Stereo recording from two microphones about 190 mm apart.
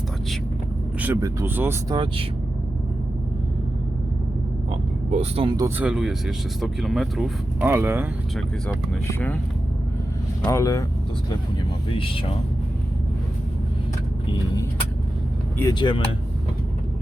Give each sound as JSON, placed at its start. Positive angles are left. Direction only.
{"t": 0.9, "sound": "speech", "side_deg": -10}
{"t": 5.1, "sound": "speech", "side_deg": -30}
{"t": 5.8, "sound": "speech", "side_deg": -5}
{"t": 7.7, "sound": "speech", "side_deg": -10}
{"t": 8.4, "sound": "speech", "side_deg": 0}
{"t": 10.4, "sound": "speech", "side_deg": 15}
{"t": 11.9, "sound": "speech", "side_deg": 30}
{"t": 15.7, "sound": "speech", "side_deg": 25}